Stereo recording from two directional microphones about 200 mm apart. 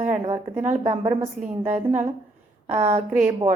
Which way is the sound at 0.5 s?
35° right (ahead or behind).